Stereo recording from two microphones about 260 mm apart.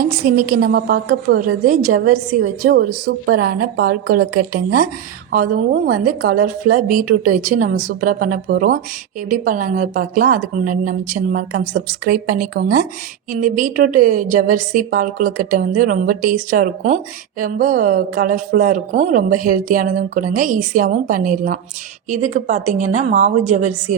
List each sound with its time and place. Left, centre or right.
0.0 s a woman's voice: right